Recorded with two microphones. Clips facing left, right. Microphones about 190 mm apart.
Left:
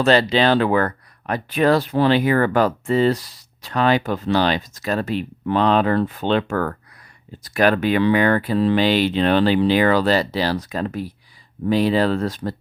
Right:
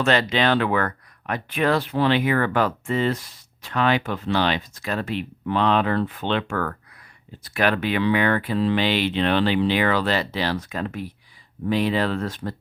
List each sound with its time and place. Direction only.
0.0 s speech: 35° left (ahead or behind)